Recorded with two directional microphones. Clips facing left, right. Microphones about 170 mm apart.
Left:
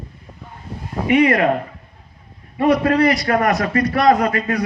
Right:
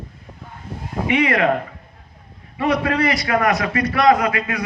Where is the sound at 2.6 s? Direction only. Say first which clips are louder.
Left 4 dB; 45° left (ahead or behind).